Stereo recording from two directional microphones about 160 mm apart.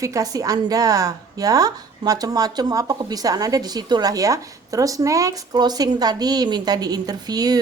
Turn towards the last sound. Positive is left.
turn(degrees=-25)  # may be behind; listen again after turning